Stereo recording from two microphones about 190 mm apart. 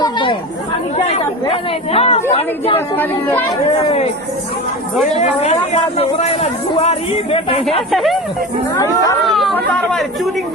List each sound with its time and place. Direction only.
0.0 s chatter: 25° left (ahead or behind)
0.9 s speech: 30° left (ahead or behind)
2.9 s speech: 10° left (ahead or behind)
3.8 s speech: 30° left (ahead or behind)
5.2 s speech: 35° left (ahead or behind)
7.8 s speech: centre (ahead or behind)
8.7 s speech: 20° left (ahead or behind)
9.2 s chatter: centre (ahead or behind)